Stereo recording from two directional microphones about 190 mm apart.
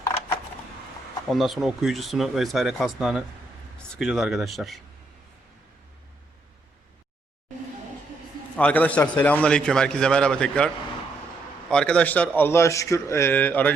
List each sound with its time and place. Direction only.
1.3 s a man's voice: centre (ahead or behind)
8.5 s a man's voice: 10° left (ahead or behind)
11.7 s speech: 5° left (ahead or behind)